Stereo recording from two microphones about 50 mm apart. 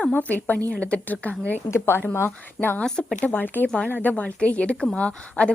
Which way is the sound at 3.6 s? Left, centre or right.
Centre.